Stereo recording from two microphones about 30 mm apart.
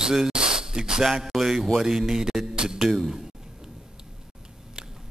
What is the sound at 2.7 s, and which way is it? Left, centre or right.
Speech, centre.